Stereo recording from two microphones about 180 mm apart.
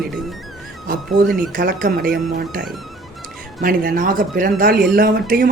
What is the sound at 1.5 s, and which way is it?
Speech, 55° right (ahead or behind).